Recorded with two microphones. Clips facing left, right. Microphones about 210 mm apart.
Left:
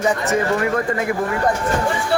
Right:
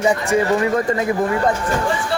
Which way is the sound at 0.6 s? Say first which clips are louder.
Right 2 dB; 25° right (ahead or behind).